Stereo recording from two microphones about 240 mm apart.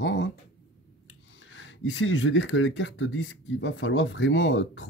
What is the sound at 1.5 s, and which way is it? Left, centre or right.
Speech, left.